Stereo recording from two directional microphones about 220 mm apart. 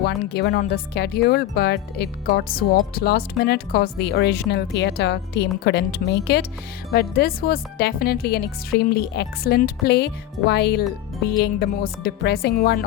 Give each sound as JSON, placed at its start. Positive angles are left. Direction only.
{"t": 0.0, "sound": "speech", "side_deg": 50}